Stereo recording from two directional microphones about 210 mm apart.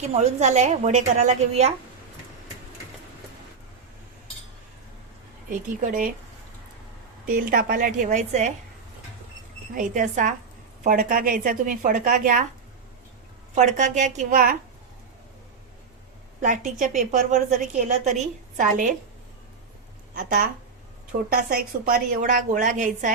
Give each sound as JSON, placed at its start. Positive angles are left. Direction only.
{"t": 0.0, "sound": "a woman's voice", "side_deg": -30}
{"t": 5.5, "sound": "a woman's voice", "side_deg": -40}
{"t": 7.3, "sound": "a woman's voice", "side_deg": -45}
{"t": 9.7, "sound": "a woman's voice", "side_deg": -35}
{"t": 13.6, "sound": "a woman's voice", "side_deg": -35}
{"t": 16.4, "sound": "a woman's voice", "side_deg": -35}
{"t": 21.8, "sound": "a woman's voice", "side_deg": -45}